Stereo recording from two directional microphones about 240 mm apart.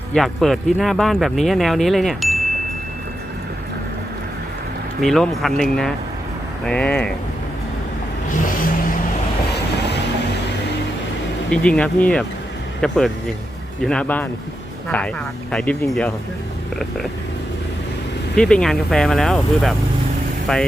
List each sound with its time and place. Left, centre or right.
0.1 s speech: centre
4.9 s speech: centre
8.3 s vehicle: left
11.5 s speech: centre
18.3 s speech: centre